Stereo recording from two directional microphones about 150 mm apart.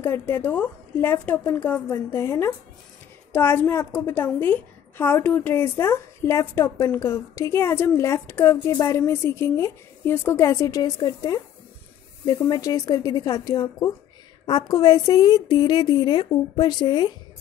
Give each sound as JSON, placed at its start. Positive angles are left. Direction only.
{"t": 0.0, "sound": "a woman's voice", "side_deg": 15}